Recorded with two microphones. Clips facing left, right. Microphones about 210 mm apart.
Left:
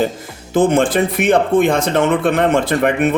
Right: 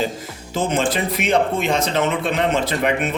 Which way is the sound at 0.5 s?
55° left (ahead or behind).